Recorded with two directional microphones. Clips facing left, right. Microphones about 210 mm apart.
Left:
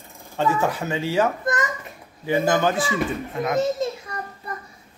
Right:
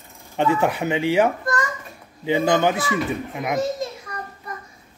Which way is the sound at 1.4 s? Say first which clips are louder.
Even; 20° left (ahead or behind).